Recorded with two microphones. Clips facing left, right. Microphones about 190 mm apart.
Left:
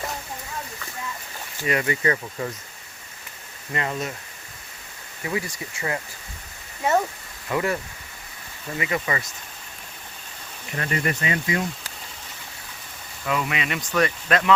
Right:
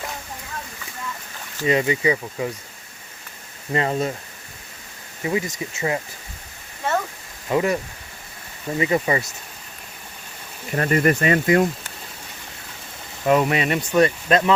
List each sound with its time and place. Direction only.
1.6 s speech: 20° right (ahead or behind)
3.7 s speech: 30° right (ahead or behind)
5.2 s speech: 20° right (ahead or behind)
7.4 s speech: 20° right (ahead or behind)
8.8 s speech: 30° right (ahead or behind)
10.8 s speech: 45° right (ahead or behind)
13.2 s speech: 40° right (ahead or behind)
13.9 s speech: 25° right (ahead or behind)